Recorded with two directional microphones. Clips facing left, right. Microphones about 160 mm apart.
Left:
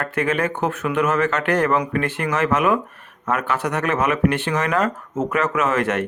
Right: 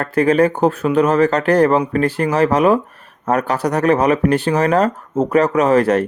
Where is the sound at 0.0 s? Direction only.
35° right (ahead or behind).